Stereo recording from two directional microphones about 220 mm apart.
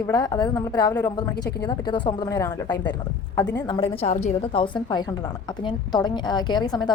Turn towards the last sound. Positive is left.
turn(degrees=20)  # may be behind; listen again after turning